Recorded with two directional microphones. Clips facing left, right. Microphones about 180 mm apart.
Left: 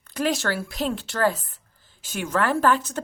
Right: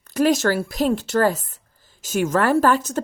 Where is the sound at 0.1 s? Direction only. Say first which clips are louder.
Right 7 dB; 45° right (ahead or behind).